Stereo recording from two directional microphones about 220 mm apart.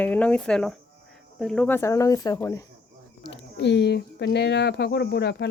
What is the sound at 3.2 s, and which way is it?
Speech, 50° left (ahead or behind).